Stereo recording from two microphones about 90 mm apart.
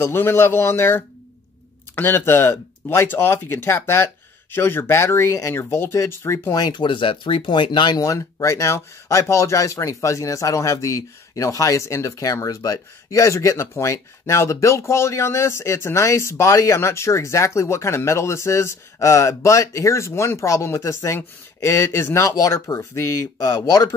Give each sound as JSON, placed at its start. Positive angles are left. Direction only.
{"t": 0.0, "sound": "speech", "side_deg": 25}
{"t": 6.5, "sound": "speech", "side_deg": 55}
{"t": 8.0, "sound": "speech", "side_deg": 35}